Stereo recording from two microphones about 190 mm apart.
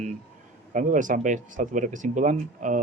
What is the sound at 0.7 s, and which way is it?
Speech, 45° right (ahead or behind).